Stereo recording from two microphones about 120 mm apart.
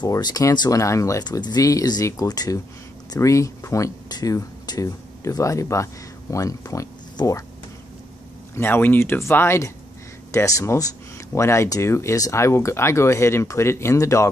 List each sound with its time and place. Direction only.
0.0 s speech: 35° left (ahead or behind)
8.5 s speech: 20° left (ahead or behind)